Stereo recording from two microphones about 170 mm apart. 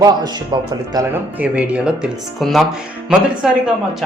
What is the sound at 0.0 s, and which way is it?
Speech, 25° right (ahead or behind).